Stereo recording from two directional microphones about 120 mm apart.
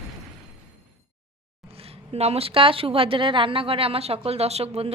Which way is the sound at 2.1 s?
60° right (ahead or behind).